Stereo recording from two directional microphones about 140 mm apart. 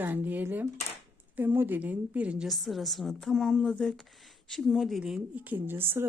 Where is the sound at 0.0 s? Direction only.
15° right (ahead or behind).